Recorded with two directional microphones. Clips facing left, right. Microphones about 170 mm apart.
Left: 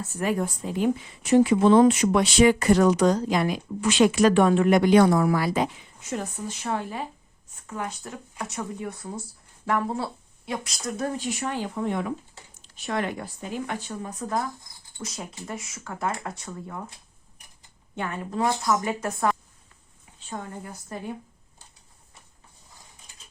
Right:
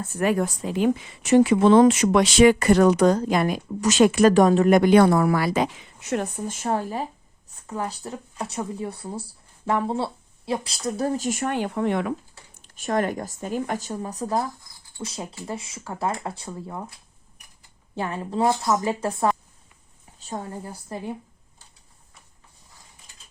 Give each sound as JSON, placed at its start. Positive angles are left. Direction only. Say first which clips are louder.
{"t": 0.0, "sound": "a woman's voice", "louder": "right 4 dB", "side_deg": -60}
{"t": 12.6, "sound": "speech", "louder": "right 4 dB", "side_deg": -45}
{"t": 17.9, "sound": "speech", "louder": "right 3 dB", "side_deg": -30}